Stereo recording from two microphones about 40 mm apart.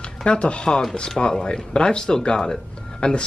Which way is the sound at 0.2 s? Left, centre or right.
Left.